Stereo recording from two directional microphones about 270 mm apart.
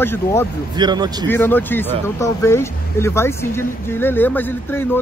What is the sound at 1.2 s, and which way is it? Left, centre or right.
Speech, centre.